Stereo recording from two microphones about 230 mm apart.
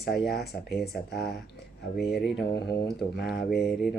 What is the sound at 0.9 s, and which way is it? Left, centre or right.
Speech, left.